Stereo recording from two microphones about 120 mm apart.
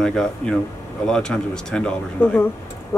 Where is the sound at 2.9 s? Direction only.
20° left (ahead or behind).